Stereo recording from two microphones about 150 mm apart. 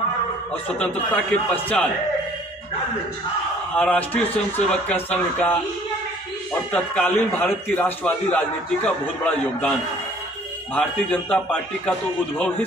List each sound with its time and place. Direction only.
1.1 s a man's voice: 10° left (ahead or behind)
3.7 s a man's voice: 10° left (ahead or behind)
6.7 s a man's voice: 10° left (ahead or behind)